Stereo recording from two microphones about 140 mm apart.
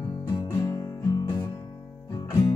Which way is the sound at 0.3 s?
25° left (ahead or behind).